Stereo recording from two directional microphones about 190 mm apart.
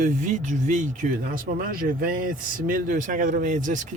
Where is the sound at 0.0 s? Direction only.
40° right (ahead or behind).